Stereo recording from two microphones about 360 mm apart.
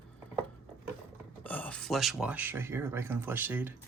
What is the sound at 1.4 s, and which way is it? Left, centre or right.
Speech, centre.